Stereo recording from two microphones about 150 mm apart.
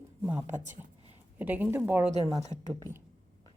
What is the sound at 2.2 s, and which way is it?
Speech, 25° left (ahead or behind).